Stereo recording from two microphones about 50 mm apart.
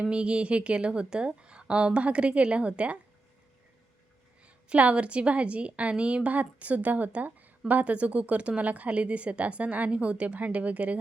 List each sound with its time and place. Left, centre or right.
0.0 s a woman's voice: right
4.4 s a woman's voice: right